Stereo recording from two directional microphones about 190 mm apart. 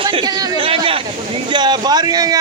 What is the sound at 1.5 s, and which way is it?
Speech, 20° right (ahead or behind).